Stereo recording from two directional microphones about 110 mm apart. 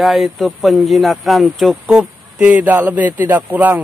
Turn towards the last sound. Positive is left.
turn(degrees=-15)  # may be behind; listen again after turning